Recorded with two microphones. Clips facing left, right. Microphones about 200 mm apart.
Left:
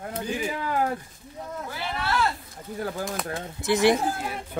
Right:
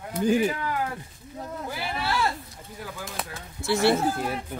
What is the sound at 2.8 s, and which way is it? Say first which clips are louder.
Speech: left 8 dB; 50° left (ahead or behind).